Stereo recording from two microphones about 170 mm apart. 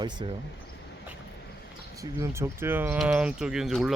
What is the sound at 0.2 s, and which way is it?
Speech, 30° right (ahead or behind).